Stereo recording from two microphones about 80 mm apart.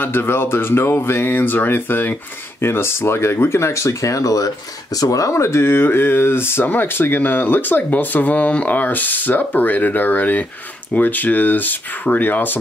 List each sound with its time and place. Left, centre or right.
0.0 s speech: left